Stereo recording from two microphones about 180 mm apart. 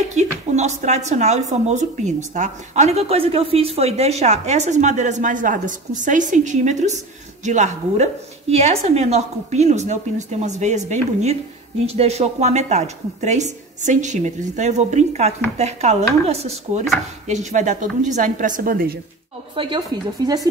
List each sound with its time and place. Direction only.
0.1 s a woman's voice: 40° right (ahead or behind)
19.5 s speech: 25° right (ahead or behind)